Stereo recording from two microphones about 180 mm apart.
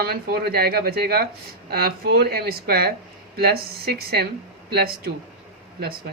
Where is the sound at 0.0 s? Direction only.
60° right (ahead or behind).